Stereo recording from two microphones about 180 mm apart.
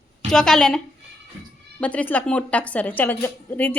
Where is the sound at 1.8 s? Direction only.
10° left (ahead or behind).